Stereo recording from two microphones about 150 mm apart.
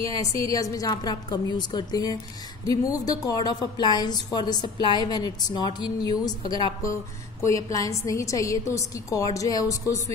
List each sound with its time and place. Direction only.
0.2 s a woman's voice: 20° left (ahead or behind)